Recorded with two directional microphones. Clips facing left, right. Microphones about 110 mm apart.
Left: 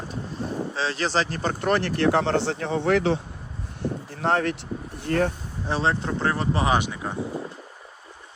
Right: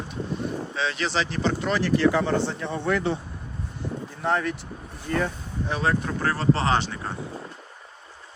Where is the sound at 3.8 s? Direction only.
65° left (ahead or behind).